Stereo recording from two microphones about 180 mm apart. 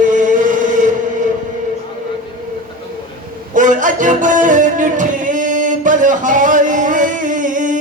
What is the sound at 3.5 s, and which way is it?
Music, 45° right (ahead or behind).